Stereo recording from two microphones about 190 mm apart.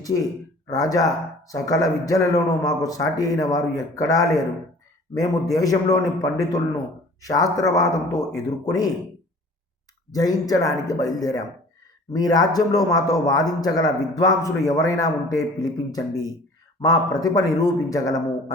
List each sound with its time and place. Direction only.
0.7 s a man's voice: 20° left (ahead or behind)
10.1 s speech: 20° left (ahead or behind)